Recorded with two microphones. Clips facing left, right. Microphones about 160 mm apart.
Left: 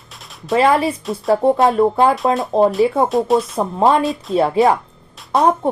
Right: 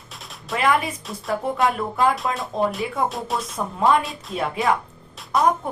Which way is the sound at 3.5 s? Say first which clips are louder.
Left 5 dB; 35° left (ahead or behind).